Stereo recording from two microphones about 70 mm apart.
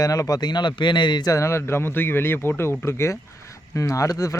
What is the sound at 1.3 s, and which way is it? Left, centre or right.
Speech, left.